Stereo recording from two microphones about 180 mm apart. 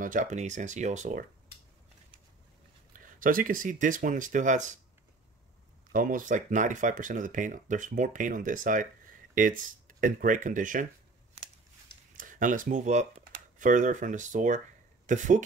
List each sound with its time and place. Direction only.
0.0 s speech: 45° right (ahead or behind)
2.9 s speech: 50° right (ahead or behind)
5.9 s speech: 50° right (ahead or behind)
12.2 s speech: 45° right (ahead or behind)